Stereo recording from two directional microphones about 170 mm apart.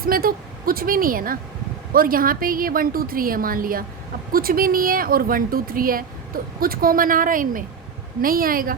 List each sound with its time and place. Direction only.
0.0 s a woman's voice: 60° right (ahead or behind)